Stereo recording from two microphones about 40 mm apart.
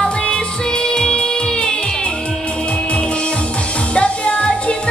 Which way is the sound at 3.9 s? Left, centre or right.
Left.